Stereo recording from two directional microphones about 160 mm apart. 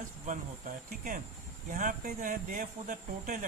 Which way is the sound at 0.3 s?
55° right (ahead or behind).